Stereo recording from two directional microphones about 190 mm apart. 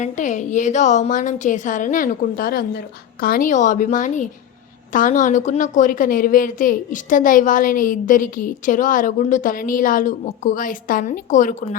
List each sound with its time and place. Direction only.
0.0 s a woman's voice: 40° left (ahead or behind)